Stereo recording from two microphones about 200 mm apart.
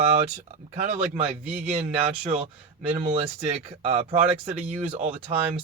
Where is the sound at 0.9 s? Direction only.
30° right (ahead or behind).